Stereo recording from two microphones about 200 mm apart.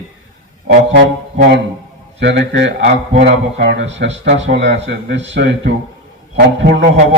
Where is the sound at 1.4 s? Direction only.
60° right (ahead or behind).